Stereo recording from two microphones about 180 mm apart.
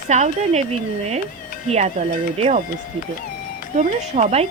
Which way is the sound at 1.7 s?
40° right (ahead or behind).